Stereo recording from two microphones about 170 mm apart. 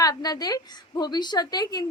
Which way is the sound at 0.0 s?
20° left (ahead or behind).